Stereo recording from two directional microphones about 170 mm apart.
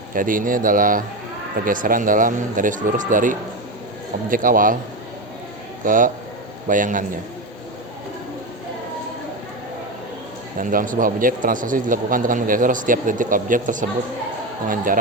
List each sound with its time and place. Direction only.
0.1 s a man's voice: 55° right (ahead or behind)
5.8 s a man's voice: 50° right (ahead or behind)
10.6 s a man's voice: 55° right (ahead or behind)